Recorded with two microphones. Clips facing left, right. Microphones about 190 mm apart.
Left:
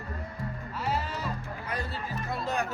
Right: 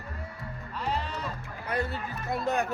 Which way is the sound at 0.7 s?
5° left (ahead or behind).